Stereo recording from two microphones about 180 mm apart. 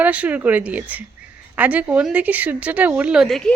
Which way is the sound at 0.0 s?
10° right (ahead or behind).